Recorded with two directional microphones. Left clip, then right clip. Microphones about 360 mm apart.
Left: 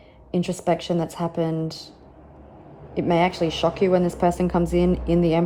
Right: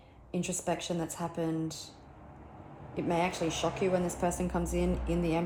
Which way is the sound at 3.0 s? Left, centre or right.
Left.